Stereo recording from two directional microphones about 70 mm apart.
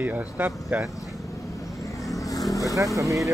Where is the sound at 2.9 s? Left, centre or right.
Right.